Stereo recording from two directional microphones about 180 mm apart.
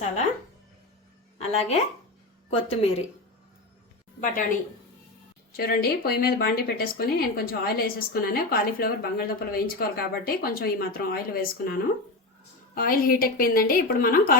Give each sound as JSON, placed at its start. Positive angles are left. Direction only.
{"t": 1.4, "sound": "a woman's voice", "side_deg": 35}
{"t": 5.5, "sound": "a woman's voice", "side_deg": 60}